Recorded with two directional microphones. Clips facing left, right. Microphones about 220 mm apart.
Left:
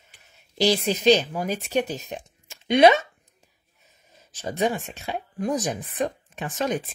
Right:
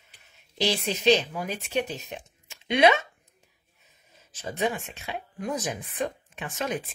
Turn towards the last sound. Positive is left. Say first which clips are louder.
# left 5 dB
turn(degrees=35)  # may be behind; listen again after turning